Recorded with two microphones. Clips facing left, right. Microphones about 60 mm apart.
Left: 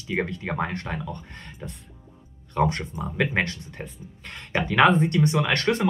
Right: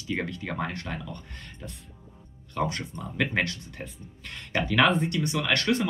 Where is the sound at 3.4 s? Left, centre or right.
Left.